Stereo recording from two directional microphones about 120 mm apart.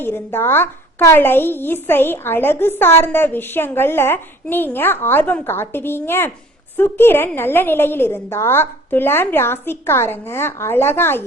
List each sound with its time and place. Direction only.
0.0 s a woman's voice: 20° left (ahead or behind)